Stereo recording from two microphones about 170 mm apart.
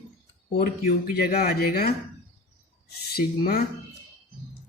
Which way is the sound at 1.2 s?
65° left (ahead or behind).